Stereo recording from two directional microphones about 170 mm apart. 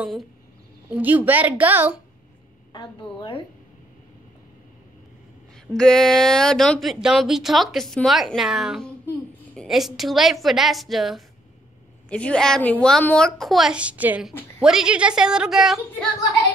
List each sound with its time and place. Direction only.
0.0 s a woman's voice: centre (ahead or behind)
2.7 s a woman's voice: 25° left (ahead or behind)
5.7 s speech: 5° left (ahead or behind)